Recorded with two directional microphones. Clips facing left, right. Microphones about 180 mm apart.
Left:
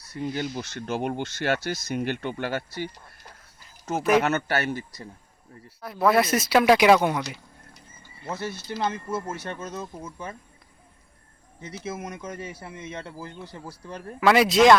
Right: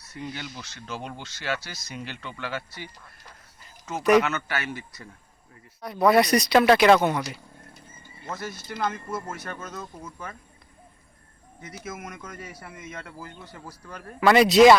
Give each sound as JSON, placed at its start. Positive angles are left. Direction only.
{"t": 0.0, "sound": "speech", "side_deg": 40}
{"t": 4.2, "sound": "speech", "side_deg": 40}
{"t": 5.8, "sound": "speech", "side_deg": 0}
{"t": 8.4, "sound": "speech", "side_deg": 30}
{"t": 11.8, "sound": "speech", "side_deg": 30}
{"t": 14.2, "sound": "speech", "side_deg": 5}